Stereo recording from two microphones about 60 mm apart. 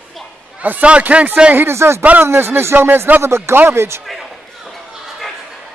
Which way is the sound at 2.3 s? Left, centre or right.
Right.